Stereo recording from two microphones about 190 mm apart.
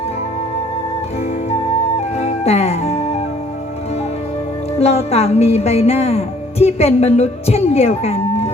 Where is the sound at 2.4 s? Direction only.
35° left (ahead or behind).